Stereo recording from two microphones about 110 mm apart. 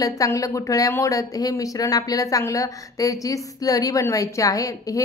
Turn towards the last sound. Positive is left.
turn(degrees=30)  # may be behind; listen again after turning